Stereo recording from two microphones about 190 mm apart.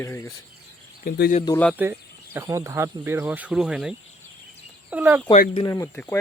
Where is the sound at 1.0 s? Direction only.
45° left (ahead or behind).